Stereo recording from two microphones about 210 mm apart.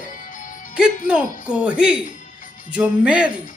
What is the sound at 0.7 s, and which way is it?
Speech, 5° right (ahead or behind).